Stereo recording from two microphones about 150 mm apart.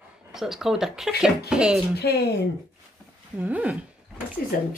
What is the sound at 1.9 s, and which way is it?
Speech, 90° left.